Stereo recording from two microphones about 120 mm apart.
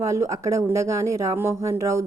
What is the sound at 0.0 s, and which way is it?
Speech, 25° right (ahead or behind).